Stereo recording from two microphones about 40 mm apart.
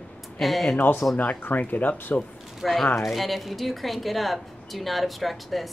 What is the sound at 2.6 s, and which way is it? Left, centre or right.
A woman's voice, centre.